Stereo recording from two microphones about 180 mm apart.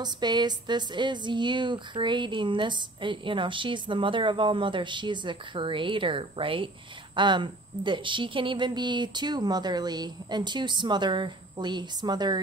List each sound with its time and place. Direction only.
0.0 s a woman's voice: 25° right (ahead or behind)